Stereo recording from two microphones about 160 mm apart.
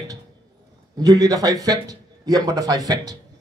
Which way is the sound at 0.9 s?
25° right (ahead or behind).